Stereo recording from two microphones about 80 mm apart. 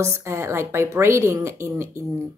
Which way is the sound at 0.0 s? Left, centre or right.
Right.